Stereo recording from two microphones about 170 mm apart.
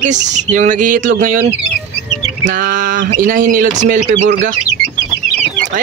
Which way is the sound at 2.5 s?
50° right (ahead or behind).